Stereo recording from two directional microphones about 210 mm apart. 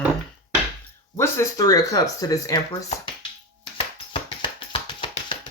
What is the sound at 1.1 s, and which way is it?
Speech, 15° left (ahead or behind).